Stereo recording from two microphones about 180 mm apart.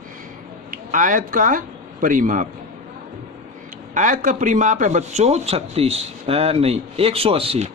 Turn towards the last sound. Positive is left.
turn(degrees=-30)  # may be behind; listen again after turning